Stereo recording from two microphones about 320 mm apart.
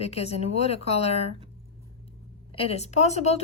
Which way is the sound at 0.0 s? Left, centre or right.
Centre.